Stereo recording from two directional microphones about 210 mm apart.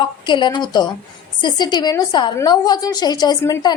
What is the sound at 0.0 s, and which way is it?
A woman's voice, 20° left (ahead or behind).